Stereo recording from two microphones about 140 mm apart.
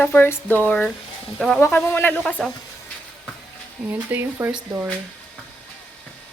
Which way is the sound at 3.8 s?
15° right (ahead or behind).